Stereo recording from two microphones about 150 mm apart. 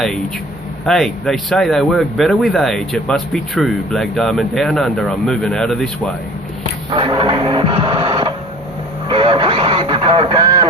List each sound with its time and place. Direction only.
0.9 s speech: 5° left (ahead or behind)
6.9 s speech: 35° right (ahead or behind)
9.0 s radio: 35° right (ahead or behind)